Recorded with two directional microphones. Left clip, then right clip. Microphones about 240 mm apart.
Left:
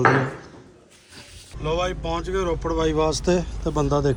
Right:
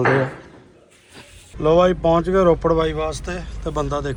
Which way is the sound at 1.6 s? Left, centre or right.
Centre.